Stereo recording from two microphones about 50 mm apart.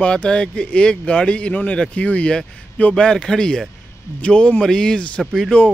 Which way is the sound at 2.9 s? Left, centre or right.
Centre.